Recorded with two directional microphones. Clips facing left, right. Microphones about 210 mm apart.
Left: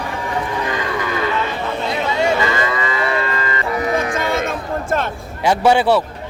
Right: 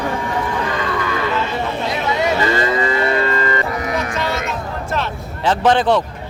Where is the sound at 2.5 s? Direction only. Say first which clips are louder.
Right 3 dB; 35° right (ahead or behind).